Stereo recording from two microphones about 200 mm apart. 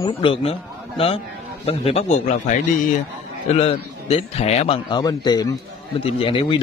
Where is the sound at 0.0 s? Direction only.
25° left (ahead or behind).